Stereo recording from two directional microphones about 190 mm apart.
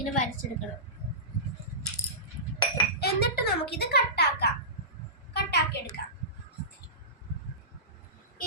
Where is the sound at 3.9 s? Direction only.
60° left (ahead or behind).